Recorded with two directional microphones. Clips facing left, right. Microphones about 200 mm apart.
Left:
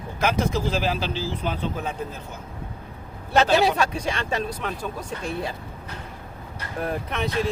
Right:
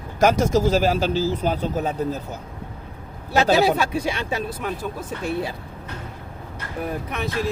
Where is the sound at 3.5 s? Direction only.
5° right (ahead or behind).